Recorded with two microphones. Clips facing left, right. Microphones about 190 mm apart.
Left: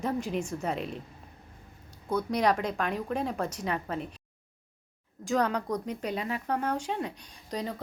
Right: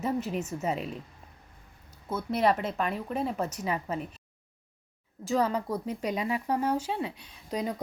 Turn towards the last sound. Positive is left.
turn(degrees=-10)  # may be behind; listen again after turning